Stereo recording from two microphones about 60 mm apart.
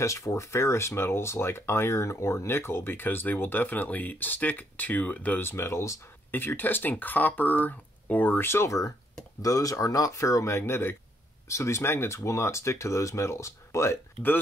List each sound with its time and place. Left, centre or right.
0.0 s speech: left
5.4 s speech: left
6.3 s speech: left
8.5 s speech: left
9.4 s speech: left